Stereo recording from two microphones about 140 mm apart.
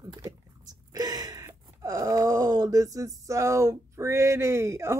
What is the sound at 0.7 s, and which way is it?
Gasp, 30° right (ahead or behind).